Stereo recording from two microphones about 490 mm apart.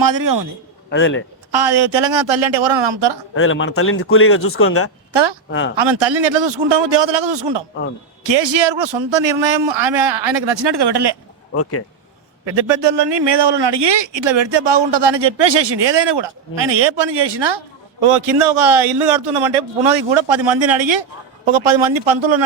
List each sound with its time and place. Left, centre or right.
0.0 s a man's voice: right
0.9 s speech: left
1.5 s a man's voice: right
3.3 s a man's voice: left
5.1 s a man's voice: right
5.5 s a man's voice: left
5.7 s a man's voice: right
11.5 s a man's voice: left
12.5 s a man's voice: right
18.0 s a man's voice: right